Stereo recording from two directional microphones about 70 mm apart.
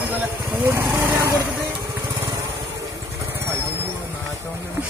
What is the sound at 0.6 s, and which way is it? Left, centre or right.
Speech, right.